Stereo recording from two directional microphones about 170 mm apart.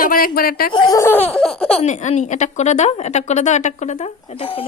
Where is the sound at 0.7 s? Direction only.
20° left (ahead or behind).